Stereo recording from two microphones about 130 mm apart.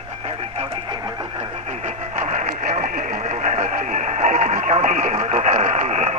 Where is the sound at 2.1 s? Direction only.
65° right (ahead or behind).